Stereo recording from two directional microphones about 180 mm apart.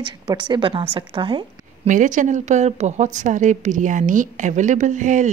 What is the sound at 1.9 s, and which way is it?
A woman's voice, 45° right (ahead or behind).